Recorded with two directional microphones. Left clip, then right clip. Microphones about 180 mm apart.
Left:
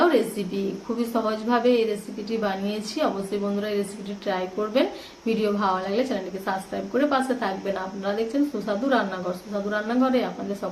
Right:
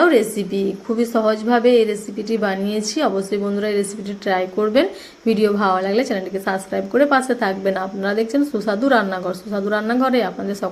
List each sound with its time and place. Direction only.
0.0 s a woman's voice: 35° right (ahead or behind)